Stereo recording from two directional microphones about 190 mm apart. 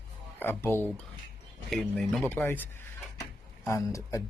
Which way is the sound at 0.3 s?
10° left (ahead or behind).